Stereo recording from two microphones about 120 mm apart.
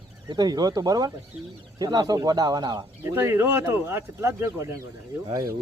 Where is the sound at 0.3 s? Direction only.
35° right (ahead or behind).